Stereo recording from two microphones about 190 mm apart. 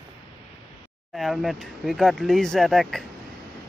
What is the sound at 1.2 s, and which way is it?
Speech, centre (ahead or behind).